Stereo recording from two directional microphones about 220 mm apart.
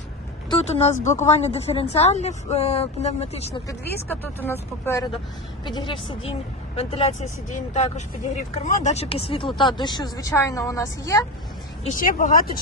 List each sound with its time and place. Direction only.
0.5 s speech: 30° left (ahead or behind)
4.1 s speech: 10° left (ahead or behind)
11.9 s speech: 40° left (ahead or behind)